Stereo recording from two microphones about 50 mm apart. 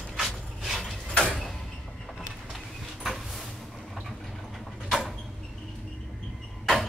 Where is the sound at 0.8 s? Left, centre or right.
Centre.